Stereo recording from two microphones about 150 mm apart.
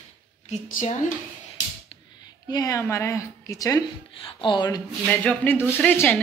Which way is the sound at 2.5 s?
25° left (ahead or behind).